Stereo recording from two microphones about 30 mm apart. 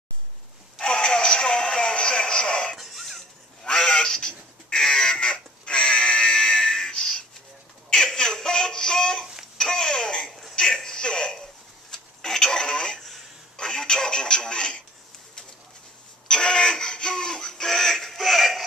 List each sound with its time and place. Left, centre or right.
0.7 s music: left
1.3 s synthetic singing: left
2.8 s a sound: centre
3.6 s quack: left
8.0 s baby laughter: left
9.6 s a sound: left
11.9 s telephone: centre
13.6 s radio: left
16.3 s music: left; by 18.6 s centre